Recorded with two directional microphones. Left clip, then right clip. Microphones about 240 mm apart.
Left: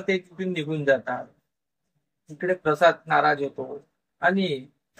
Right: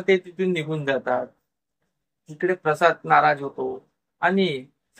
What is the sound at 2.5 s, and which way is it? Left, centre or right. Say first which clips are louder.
Speech: left 1 dB; right.